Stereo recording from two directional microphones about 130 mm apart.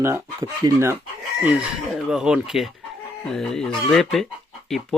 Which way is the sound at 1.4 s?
10° right (ahead or behind).